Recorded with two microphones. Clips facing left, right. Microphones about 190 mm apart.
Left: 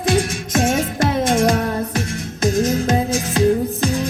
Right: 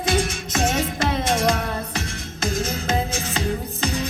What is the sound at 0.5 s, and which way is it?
Music, 50° left (ahead or behind).